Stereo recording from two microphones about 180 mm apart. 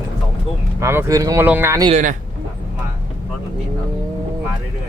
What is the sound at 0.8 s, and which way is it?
Speech, 15° right (ahead or behind).